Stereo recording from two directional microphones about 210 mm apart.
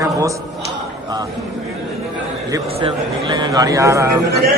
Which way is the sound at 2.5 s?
25° right (ahead or behind).